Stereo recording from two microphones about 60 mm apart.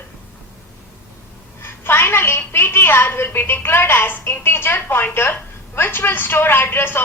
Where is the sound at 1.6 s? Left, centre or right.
Left.